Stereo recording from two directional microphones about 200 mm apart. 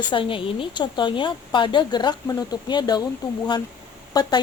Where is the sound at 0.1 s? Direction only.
25° left (ahead or behind).